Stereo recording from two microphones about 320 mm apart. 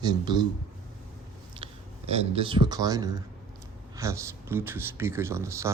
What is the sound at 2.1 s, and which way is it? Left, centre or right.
Speech, centre.